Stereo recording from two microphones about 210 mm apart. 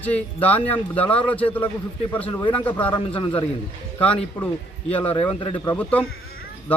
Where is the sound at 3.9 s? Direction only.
5° left (ahead or behind).